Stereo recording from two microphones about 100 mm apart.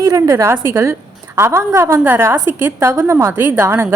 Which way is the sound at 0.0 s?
35° right (ahead or behind).